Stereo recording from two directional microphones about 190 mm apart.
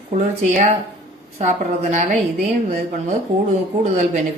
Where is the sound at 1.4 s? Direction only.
35° right (ahead or behind).